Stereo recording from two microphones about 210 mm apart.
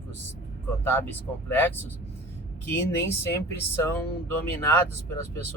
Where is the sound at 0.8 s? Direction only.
10° left (ahead or behind).